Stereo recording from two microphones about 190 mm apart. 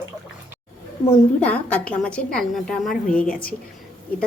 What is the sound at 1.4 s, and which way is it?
A woman's voice, 5° left (ahead or behind).